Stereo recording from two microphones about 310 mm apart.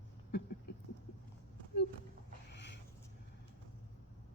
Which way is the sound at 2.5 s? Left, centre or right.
Left.